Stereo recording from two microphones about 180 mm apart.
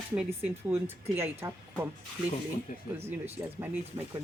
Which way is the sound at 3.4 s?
15° right (ahead or behind).